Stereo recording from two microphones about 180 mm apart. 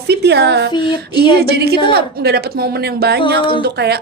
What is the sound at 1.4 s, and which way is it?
A woman's voice, 60° right (ahead or behind).